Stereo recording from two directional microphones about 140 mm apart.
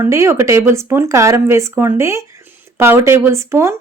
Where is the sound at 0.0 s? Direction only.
20° right (ahead or behind).